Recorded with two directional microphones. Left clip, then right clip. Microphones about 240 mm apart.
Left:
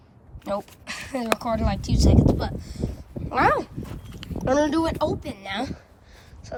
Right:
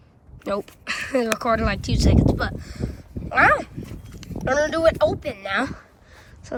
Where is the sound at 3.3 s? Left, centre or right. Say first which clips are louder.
Right 4 dB; centre.